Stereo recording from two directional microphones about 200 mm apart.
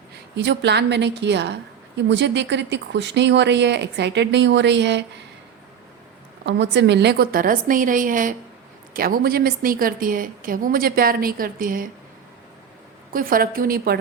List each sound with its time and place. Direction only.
0.3 s speech: 60° right (ahead or behind)
6.4 s a woman's voice: 60° right (ahead or behind); by 11.9 s 45° right (ahead or behind)
13.1 s a woman's voice: 45° right (ahead or behind)